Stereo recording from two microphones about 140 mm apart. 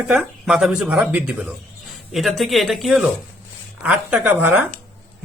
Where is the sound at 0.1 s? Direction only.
5° right (ahead or behind).